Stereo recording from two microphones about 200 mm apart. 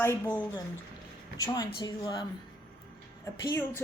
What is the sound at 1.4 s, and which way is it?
Speech, 20° left (ahead or behind).